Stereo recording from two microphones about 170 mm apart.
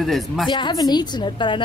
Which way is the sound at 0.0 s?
Centre (ahead or behind).